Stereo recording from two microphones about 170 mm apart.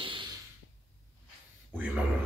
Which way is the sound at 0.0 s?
30° right (ahead or behind).